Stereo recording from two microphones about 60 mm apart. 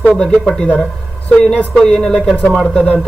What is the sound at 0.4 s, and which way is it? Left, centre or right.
Speech, centre.